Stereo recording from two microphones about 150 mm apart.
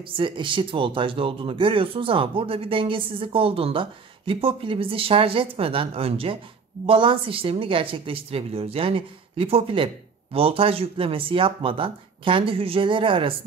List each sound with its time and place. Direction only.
0.2 s speech: 35° right (ahead or behind)